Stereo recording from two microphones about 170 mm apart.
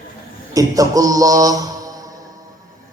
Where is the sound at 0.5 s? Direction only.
20° right (ahead or behind).